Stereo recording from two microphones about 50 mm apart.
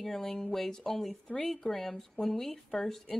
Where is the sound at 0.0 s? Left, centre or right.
Centre.